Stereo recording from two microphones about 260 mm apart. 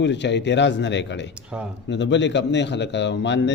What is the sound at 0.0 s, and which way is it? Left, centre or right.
A man's voice, left.